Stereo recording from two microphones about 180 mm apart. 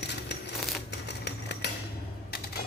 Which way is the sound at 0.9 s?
70° left (ahead or behind).